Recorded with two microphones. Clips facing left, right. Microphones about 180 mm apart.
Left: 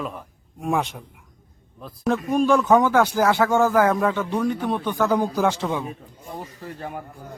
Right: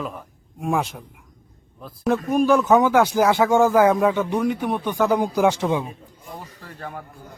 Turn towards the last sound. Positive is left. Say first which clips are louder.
# left 2 dB
turn(degrees=15)  # may be behind; listen again after turning